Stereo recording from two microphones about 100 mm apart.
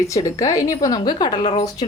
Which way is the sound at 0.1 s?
35° left (ahead or behind).